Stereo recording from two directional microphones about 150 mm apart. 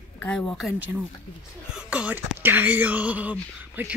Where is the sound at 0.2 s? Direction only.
10° left (ahead or behind).